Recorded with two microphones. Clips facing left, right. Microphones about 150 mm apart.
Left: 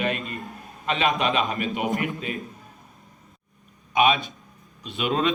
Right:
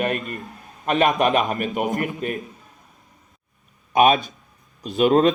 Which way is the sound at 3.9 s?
45° right (ahead or behind).